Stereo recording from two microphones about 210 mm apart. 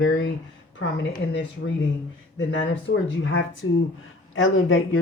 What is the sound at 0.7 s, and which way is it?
Speech, 65° left (ahead or behind).